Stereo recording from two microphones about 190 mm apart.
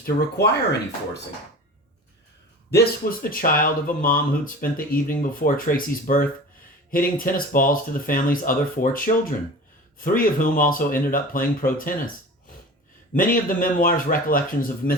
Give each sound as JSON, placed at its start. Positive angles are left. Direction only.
{"t": 0.0, "sound": "speech", "side_deg": 55}
{"t": 2.6, "sound": "speech", "side_deg": 55}
{"t": 13.1, "sound": "speech", "side_deg": 45}